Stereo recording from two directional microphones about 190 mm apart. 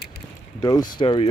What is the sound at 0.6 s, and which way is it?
Speech, 20° left (ahead or behind).